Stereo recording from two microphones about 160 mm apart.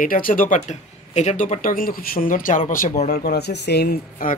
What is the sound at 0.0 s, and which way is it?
Speech, 60° left (ahead or behind).